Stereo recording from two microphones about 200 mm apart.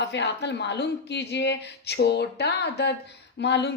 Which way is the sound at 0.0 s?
60° left (ahead or behind).